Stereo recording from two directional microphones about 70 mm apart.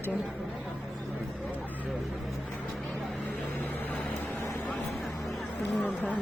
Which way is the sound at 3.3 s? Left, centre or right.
Left.